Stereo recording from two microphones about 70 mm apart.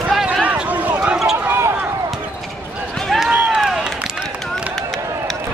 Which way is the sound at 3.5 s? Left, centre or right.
Centre.